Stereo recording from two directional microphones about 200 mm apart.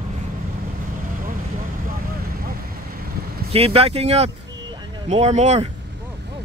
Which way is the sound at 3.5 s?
30° right (ahead or behind).